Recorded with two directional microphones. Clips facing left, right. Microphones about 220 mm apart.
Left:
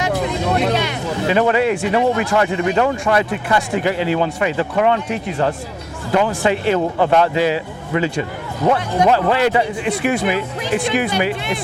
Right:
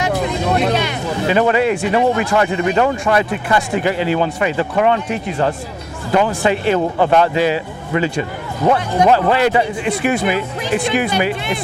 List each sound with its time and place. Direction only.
0.0 s a sound: 20° right (ahead or behind)
1.0 s speech: 20° right (ahead or behind)
6.1 s a man's voice: 25° right (ahead or behind)